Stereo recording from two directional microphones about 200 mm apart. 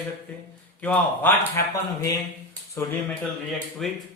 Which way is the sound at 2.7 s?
15° left (ahead or behind).